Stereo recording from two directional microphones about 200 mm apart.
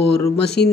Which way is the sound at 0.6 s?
55° left (ahead or behind).